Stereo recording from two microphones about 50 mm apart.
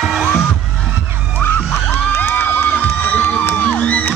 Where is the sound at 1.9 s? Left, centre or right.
Left.